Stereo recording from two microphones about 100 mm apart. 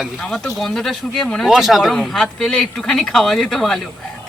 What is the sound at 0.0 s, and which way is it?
Speech, 5° left (ahead or behind).